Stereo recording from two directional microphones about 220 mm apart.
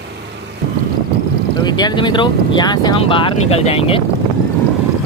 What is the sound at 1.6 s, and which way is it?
Speech, 20° left (ahead or behind).